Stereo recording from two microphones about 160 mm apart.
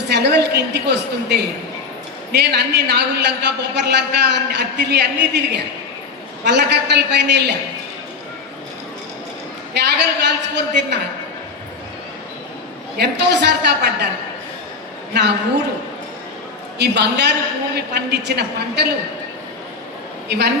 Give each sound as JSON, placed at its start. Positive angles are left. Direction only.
{"t": 0.1, "sound": "a woman's voice", "side_deg": -90}
{"t": 9.7, "sound": "a woman's voice", "side_deg": -90}
{"t": 13.0, "sound": "a woman's voice", "side_deg": -90}
{"t": 15.1, "sound": "a woman's voice", "side_deg": -90}
{"t": 16.7, "sound": "a woman's voice", "side_deg": -90}
{"t": 20.2, "sound": "a man's voice", "side_deg": -90}